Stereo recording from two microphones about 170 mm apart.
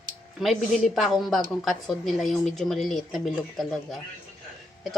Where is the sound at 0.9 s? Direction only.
Centre (ahead or behind).